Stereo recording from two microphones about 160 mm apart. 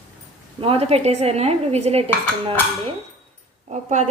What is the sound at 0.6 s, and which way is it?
Dishes, 40° right (ahead or behind).